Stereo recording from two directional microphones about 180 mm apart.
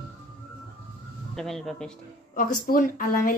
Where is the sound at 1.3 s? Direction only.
Centre (ahead or behind).